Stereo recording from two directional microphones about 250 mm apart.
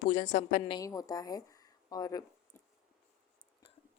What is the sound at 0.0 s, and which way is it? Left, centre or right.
Speech, left.